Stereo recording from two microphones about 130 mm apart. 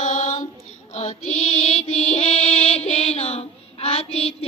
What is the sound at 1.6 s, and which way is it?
Music, 60° left (ahead or behind).